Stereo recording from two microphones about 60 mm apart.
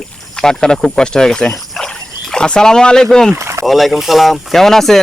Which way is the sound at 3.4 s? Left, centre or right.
Right.